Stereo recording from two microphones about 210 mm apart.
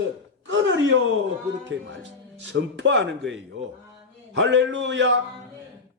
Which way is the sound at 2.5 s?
60° right (ahead or behind).